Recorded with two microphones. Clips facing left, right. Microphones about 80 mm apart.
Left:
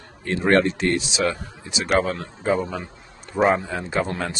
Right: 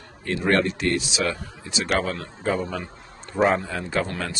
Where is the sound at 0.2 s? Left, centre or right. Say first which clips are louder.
Left 3 dB; left.